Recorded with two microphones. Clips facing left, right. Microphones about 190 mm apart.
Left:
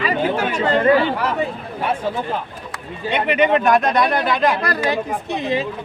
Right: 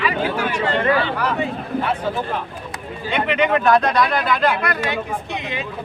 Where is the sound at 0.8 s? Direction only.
25° left (ahead or behind).